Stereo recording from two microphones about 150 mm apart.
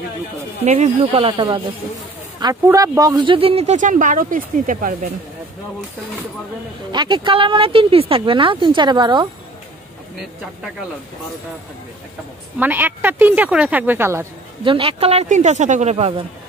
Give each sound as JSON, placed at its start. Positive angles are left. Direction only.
{"t": 0.7, "sound": "speech", "side_deg": -45}
{"t": 2.4, "sound": "speech", "side_deg": -20}
{"t": 6.9, "sound": "speech", "side_deg": -30}
{"t": 12.5, "sound": "speech", "side_deg": -15}
{"t": 14.6, "sound": "speech", "side_deg": -35}